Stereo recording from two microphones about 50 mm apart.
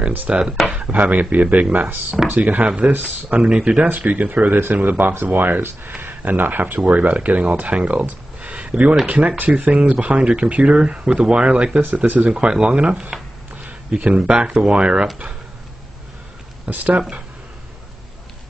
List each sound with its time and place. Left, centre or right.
0.3 s speech: centre
0.7 s a sound: centre
0.9 s speech: right
3.3 s speech: centre
3.8 s speech: right
13.1 s a sound: centre
13.7 s speech: right
16.6 s speech: right